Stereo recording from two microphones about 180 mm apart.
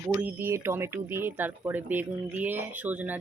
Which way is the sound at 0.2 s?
10° right (ahead or behind).